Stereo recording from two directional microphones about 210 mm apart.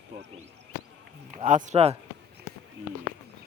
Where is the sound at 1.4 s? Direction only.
35° right (ahead or behind).